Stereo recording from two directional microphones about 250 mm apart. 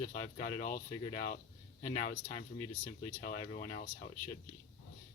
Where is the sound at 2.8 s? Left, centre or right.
Left.